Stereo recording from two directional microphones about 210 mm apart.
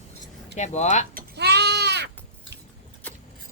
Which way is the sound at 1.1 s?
50° right (ahead or behind).